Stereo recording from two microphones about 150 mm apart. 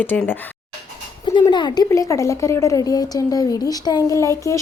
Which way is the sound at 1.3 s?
30° left (ahead or behind).